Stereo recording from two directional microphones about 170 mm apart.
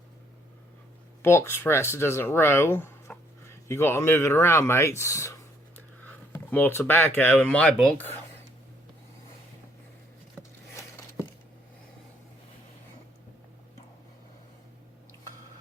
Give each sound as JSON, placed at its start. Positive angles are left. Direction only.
{"t": 1.2, "sound": "speech", "side_deg": 15}